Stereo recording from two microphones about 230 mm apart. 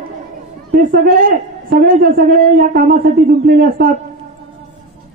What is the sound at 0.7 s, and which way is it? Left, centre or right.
A woman's voice, right.